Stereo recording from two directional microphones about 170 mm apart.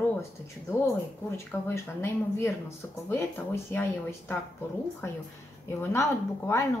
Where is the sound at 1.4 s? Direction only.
15° left (ahead or behind).